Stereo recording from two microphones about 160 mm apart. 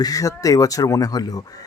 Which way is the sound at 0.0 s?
20° left (ahead or behind).